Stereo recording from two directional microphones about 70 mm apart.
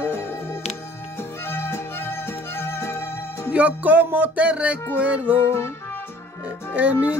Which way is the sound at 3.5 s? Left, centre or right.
Right.